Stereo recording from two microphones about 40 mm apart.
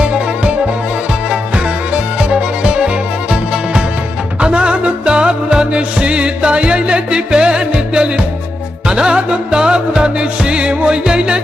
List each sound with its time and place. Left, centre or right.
0.0 s music: right
2.3 s music: right
4.4 s music: right